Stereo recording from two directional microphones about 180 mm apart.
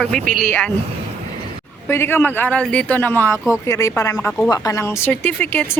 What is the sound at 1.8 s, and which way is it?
Speech, 15° left (ahead or behind).